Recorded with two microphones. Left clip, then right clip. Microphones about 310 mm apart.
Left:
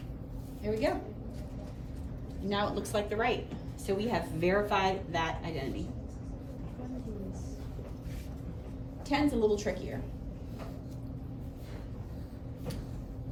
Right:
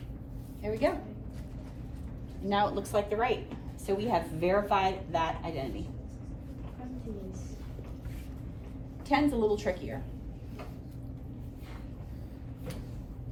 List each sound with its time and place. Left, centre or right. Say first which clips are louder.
0.6 s a woman's voice: left 1 dB; right
2.5 s a woman's voice: right 4 dB; centre
9.0 s a woman's voice: right 1 dB; right